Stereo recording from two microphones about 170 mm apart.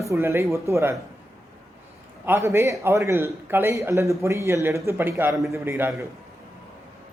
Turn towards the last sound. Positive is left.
turn(degrees=-15)  # may be behind; listen again after turning